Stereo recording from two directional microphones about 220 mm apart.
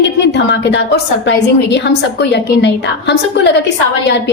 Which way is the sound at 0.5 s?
55° left (ahead or behind).